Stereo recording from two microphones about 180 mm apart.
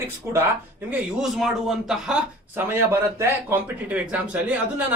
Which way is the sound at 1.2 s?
Centre (ahead or behind).